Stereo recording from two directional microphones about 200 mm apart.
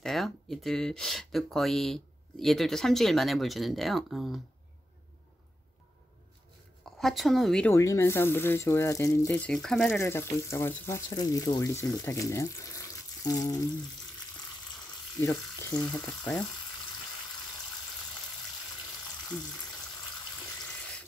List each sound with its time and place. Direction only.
0.0 s speech: centre (ahead or behind)
6.8 s a woman's voice: centre (ahead or behind)
7.7 s speech: 15° left (ahead or behind)
9.9 s speech: 15° left (ahead or behind)
15.1 s speech: 15° left (ahead or behind)
15.8 s speech: 5° left (ahead or behind)